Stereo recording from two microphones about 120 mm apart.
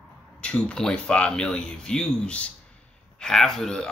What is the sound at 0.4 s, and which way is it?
Speech, 10° left (ahead or behind).